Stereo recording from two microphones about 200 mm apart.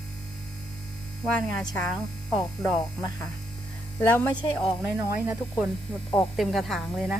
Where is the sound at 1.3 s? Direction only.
5° left (ahead or behind).